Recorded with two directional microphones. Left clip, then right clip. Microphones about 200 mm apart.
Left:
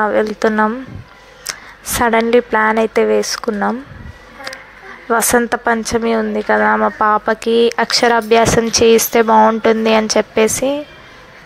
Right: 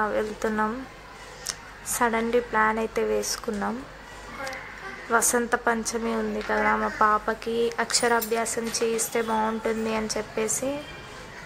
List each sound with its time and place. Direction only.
0.0 s speech: 30° left (ahead or behind)
5.1 s speech: 35° left (ahead or behind)